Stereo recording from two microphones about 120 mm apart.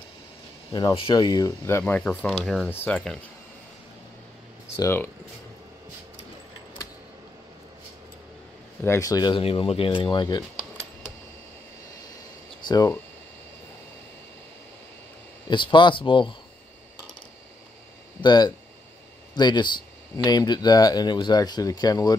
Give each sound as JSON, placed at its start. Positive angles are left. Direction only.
{"t": 0.7, "sound": "speech", "side_deg": 40}
{"t": 1.6, "sound": "speech", "side_deg": 20}
{"t": 2.4, "sound": "speech", "side_deg": 0}
{"t": 2.7, "sound": "speech", "side_deg": 15}
{"t": 8.8, "sound": "speech", "side_deg": 20}
{"t": 9.1, "sound": "speech", "side_deg": 35}
{"t": 9.4, "sound": "speech", "side_deg": 55}
{"t": 12.6, "sound": "speech", "side_deg": 35}
{"t": 15.5, "sound": "speech", "side_deg": 40}
{"t": 18.2, "sound": "speech", "side_deg": 35}